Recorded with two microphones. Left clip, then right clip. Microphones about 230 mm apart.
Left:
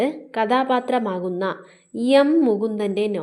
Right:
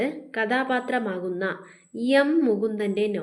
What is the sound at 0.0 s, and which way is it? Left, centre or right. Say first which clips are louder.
A woman's voice: left 5 dB; left.